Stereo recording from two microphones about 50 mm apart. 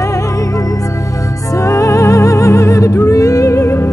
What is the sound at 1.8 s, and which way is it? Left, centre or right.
Music, left.